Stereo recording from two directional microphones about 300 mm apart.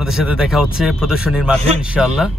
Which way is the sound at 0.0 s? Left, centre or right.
Centre.